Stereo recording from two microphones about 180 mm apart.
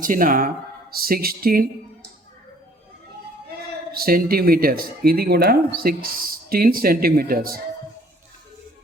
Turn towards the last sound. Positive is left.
turn(degrees=-55)  # may be behind; listen again after turning